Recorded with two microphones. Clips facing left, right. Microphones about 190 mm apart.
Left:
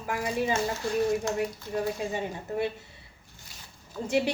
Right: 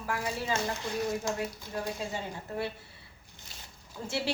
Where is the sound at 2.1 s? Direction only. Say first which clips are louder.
Left 5 dB; 20° left (ahead or behind).